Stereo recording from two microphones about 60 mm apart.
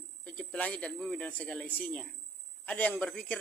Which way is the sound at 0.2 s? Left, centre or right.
Left.